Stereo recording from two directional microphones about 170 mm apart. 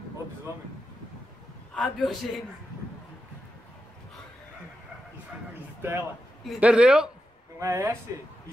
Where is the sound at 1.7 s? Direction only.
Centre (ahead or behind).